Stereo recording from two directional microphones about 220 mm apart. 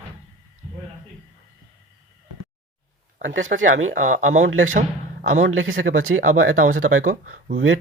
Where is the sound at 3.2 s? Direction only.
60° right (ahead or behind).